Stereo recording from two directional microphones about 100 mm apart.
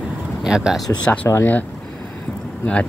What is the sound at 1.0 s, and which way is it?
Speech, 15° left (ahead or behind).